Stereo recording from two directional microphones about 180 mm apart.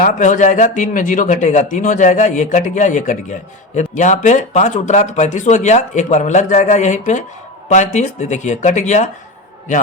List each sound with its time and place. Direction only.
0.0 s a man's voice: 45° left (ahead or behind)